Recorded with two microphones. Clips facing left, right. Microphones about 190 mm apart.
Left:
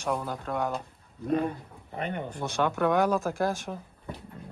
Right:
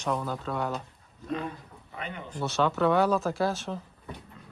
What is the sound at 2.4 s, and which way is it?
Speech, 15° left (ahead or behind).